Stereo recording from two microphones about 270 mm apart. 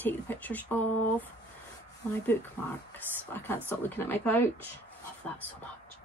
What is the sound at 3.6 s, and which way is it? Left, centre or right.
Speech, centre.